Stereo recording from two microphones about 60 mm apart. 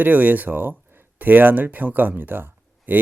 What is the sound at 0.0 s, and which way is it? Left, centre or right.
Speech, right.